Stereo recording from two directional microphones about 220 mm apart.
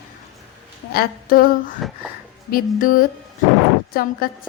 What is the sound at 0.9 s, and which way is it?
A woman's voice, 40° left (ahead or behind).